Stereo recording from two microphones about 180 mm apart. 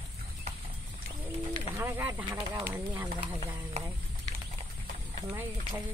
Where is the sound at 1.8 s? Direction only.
15° right (ahead or behind).